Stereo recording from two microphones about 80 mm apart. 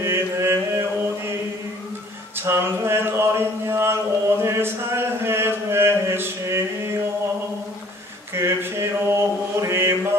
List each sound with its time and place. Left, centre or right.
0.0 s mantra: right
2.4 s a sound: right
8.4 s mantra: right